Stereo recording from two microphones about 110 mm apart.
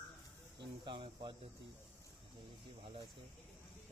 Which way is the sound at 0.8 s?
45° right (ahead or behind).